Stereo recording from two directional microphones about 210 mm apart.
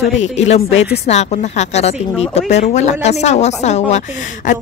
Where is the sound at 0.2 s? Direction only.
30° left (ahead or behind).